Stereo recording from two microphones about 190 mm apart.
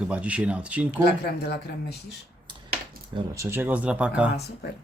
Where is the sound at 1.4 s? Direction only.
60° left (ahead or behind).